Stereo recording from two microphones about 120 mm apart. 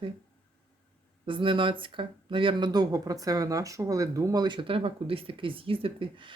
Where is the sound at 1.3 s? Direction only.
45° right (ahead or behind).